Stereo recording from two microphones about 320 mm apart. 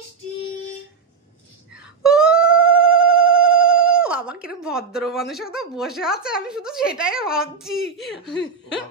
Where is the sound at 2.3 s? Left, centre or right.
Left.